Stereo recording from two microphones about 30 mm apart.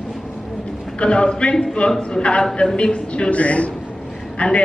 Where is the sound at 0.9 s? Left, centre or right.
Left.